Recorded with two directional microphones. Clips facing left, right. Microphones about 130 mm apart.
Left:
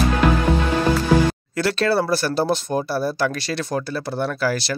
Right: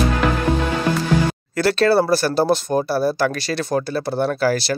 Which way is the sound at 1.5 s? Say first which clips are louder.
Right 5 dB; 40° right (ahead or behind).